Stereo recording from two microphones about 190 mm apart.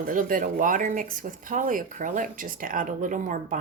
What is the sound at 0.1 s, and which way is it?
Speech, 45° right (ahead or behind).